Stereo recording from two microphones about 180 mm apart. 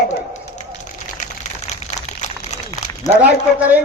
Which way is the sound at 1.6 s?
40° left (ahead or behind).